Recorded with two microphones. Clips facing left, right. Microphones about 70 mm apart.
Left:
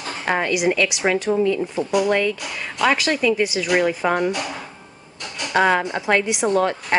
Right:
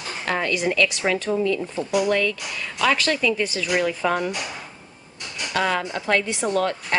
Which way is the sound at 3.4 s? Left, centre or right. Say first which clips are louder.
Left 4 dB; centre.